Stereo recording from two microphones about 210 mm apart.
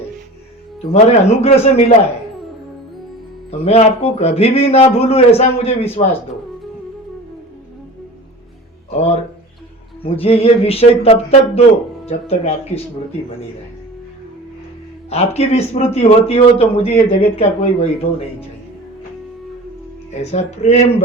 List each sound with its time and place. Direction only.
0.8 s a man's voice: 30° left (ahead or behind)
3.6 s a man's voice: 30° left (ahead or behind)
8.9 s a man's voice: 30° left (ahead or behind)
15.1 s a man's voice: 30° left (ahead or behind)
20.3 s speech: 30° left (ahead or behind)